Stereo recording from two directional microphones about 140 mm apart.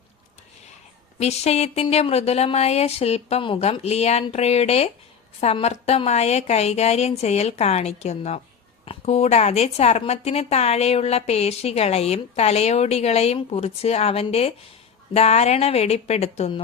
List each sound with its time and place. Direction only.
1.2 s a woman's voice: 50° left (ahead or behind)